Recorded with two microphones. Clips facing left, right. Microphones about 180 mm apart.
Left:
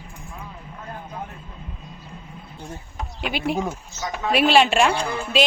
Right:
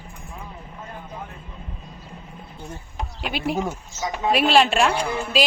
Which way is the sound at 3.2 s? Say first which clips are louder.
Left 1 dB; centre (ahead or behind).